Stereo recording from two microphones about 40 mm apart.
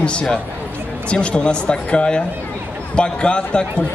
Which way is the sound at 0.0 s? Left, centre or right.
Left.